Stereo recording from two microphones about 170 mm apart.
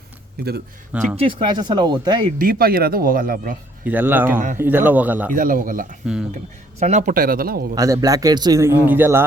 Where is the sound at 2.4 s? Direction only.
60° right (ahead or behind).